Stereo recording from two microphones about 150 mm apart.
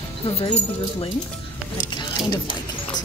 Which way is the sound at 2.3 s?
30° left (ahead or behind).